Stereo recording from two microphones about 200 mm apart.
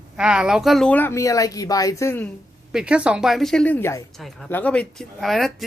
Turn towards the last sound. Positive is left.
turn(degrees=0)  # may be behind; listen again after turning